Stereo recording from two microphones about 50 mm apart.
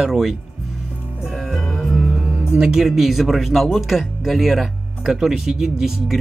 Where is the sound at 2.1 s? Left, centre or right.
Right.